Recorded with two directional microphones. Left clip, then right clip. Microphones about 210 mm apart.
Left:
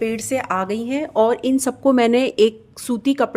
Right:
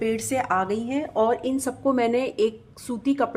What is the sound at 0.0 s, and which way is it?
Speech, 30° left (ahead or behind).